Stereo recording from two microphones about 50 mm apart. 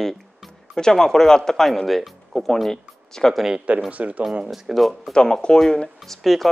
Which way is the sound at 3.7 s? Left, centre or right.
Right.